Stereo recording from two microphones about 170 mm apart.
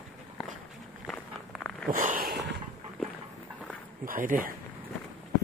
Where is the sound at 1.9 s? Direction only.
50° right (ahead or behind).